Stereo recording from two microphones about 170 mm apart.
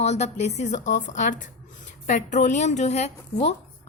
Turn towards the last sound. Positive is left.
turn(degrees=40)  # may be behind; listen again after turning